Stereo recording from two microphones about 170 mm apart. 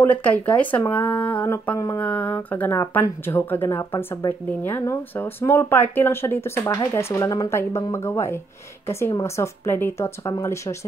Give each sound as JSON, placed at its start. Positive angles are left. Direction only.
{"t": 0.0, "sound": "speech", "side_deg": 10}